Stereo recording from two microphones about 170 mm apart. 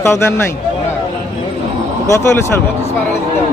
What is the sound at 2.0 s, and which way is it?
Speech, 15° left (ahead or behind).